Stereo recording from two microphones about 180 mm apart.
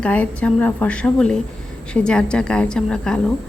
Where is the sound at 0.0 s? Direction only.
5° left (ahead or behind).